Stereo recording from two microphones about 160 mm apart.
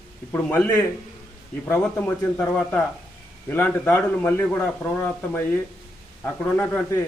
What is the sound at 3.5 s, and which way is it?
A man's voice, 15° left (ahead or behind).